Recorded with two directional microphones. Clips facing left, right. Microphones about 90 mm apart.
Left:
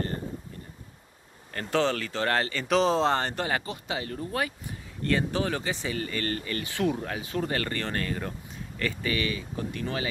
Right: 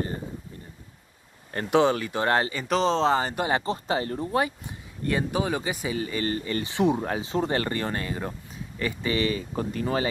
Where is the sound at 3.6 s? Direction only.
35° right (ahead or behind).